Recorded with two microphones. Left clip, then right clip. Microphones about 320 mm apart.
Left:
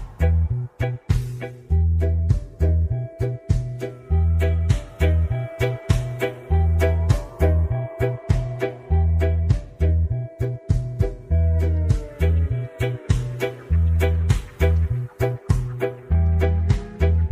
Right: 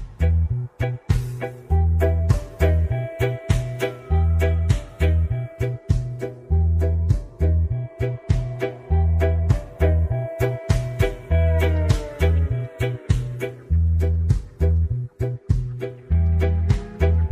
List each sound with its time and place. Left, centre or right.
0.7 s music: centre
1.7 s music: right
3.8 s music: centre; by 6.6 s left
6.8 s music: left
7.3 s music: left; by 9.6 s centre
9.8 s music: centre
10.4 s music: right; by 15.9 s left
16.1 s music: centre